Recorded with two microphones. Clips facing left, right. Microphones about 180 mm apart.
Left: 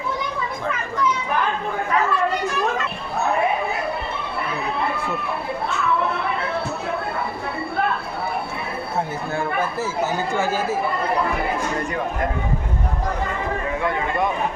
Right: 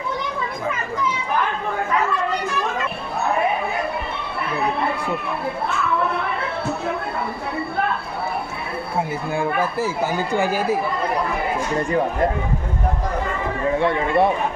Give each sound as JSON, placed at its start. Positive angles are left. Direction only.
{"t": 10.1, "sound": "speech", "side_deg": -15}
{"t": 13.7, "sound": "speech", "side_deg": -30}